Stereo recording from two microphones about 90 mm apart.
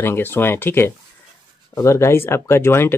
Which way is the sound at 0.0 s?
25° left (ahead or behind).